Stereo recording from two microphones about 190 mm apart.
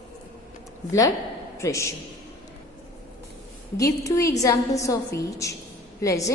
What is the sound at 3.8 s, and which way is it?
A woman's voice, 15° left (ahead or behind).